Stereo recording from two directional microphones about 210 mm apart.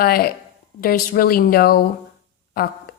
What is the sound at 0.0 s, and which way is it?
A woman's voice, 45° left (ahead or behind).